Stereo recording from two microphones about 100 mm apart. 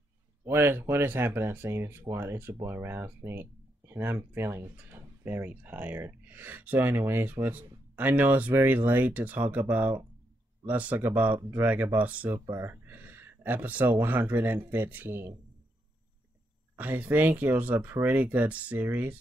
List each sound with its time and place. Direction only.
0.5 s speech: 25° right (ahead or behind)
16.7 s speech: 15° right (ahead or behind)